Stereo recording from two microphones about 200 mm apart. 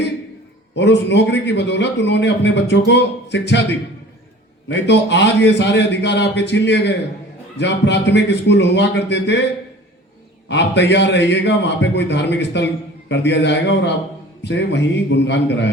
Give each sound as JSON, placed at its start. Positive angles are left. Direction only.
{"t": 0.8, "sound": "a man's voice", "side_deg": 60}
{"t": 4.7, "sound": "a man's voice", "side_deg": 60}
{"t": 10.5, "sound": "a man's voice", "side_deg": 60}